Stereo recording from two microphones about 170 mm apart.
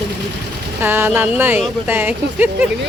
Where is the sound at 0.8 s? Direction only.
10° right (ahead or behind).